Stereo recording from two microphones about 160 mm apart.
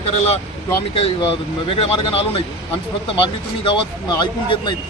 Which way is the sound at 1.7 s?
35° left (ahead or behind).